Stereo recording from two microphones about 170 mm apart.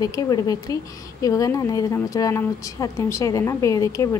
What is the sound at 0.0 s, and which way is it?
A woman's voice, 20° left (ahead or behind).